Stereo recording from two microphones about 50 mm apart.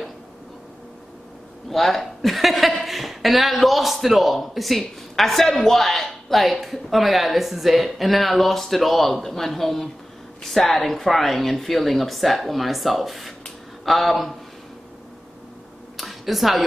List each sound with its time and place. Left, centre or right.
1.7 s a woman's voice: centre
16.0 s speech: centre